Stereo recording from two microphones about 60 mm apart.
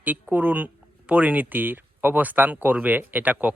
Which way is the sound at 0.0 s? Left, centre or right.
Right.